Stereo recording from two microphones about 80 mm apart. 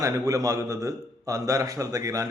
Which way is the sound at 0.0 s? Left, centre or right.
Right.